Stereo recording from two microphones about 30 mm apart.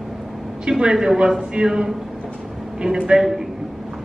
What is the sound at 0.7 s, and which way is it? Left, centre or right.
Speech, right.